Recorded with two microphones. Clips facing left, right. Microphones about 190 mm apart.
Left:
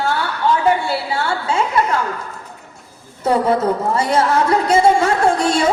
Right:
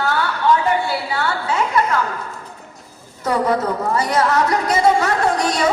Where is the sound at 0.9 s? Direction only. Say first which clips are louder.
Left 1 dB; 25° left (ahead or behind).